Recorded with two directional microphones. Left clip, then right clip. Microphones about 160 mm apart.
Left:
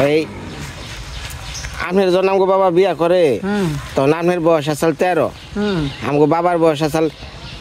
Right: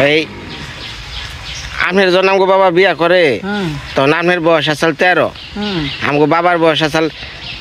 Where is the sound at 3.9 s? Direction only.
5° left (ahead or behind).